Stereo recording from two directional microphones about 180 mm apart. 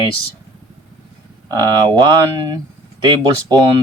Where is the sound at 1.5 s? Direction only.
25° right (ahead or behind).